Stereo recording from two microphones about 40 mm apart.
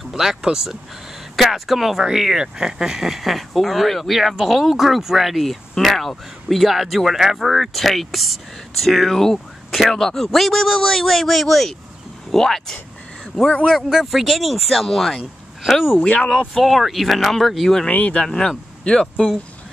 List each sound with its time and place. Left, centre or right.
0.1 s speech: centre
3.3 s speech: centre
13.3 s speech: left
13.8 s speech: centre
17.8 s speech: left
18.9 s speech: left